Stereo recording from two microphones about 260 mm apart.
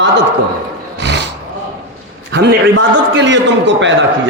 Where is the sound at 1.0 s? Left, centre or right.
Right.